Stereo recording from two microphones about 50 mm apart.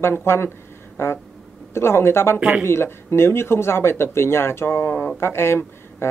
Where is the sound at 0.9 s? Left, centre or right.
Left.